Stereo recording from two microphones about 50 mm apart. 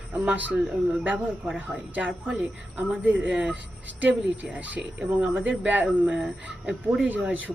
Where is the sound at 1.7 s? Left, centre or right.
Right.